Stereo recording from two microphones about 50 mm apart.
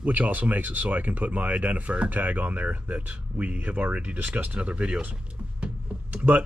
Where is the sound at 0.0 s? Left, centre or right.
Right.